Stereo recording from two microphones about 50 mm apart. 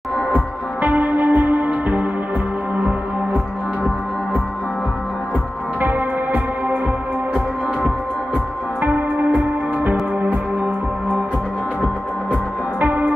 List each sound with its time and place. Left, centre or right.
0.8 s music: right
5.8 s music: right
8.8 s music: right
12.8 s music: right